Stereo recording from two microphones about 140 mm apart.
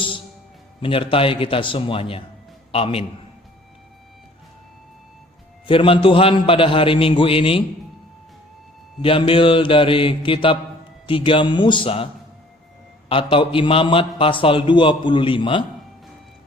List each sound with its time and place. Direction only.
0.8 s a man's voice: 40° left (ahead or behind)
5.6 s a man's voice: 40° left (ahead or behind)
9.0 s a man's voice: 40° left (ahead or behind)
13.1 s a man's voice: 40° left (ahead or behind)